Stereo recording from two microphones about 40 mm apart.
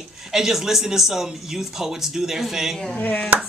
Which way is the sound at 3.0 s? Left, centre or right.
Left.